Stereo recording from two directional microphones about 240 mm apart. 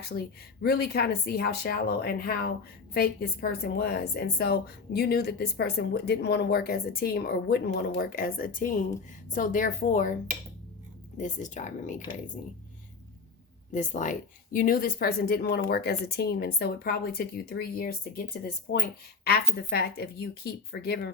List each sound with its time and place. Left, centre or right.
0.1 s a woman's voice: left
11.2 s a woman's voice: left
13.7 s a woman's voice: left